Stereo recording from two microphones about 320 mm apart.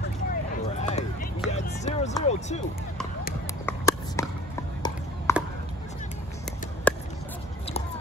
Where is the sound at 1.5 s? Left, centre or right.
Left.